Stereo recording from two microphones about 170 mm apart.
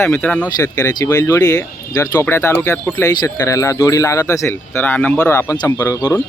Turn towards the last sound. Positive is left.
turn(degrees=15)  # may be behind; listen again after turning